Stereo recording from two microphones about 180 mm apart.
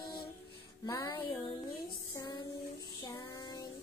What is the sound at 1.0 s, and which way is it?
Music, 25° left (ahead or behind).